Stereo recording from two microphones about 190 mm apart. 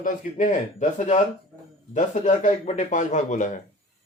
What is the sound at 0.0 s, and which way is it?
A man's voice, 40° left (ahead or behind).